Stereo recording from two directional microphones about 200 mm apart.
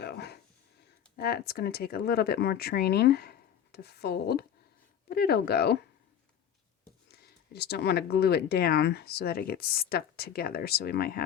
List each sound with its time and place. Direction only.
0.0 s speech: 55° left (ahead or behind)
7.1 s speech: 55° left (ahead or behind)